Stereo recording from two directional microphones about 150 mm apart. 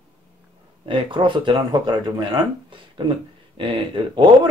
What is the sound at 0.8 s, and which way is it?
Speech, 35° right (ahead or behind).